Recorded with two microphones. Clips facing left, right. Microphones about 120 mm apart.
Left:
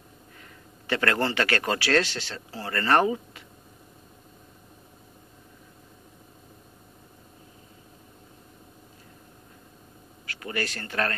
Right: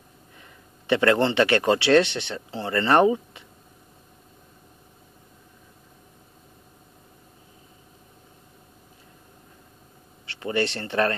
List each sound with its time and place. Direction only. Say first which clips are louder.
0.4 s speech: left 1 dB; 20° right (ahead or behind)
10.2 s speech: right 6 dB; 25° right (ahead or behind)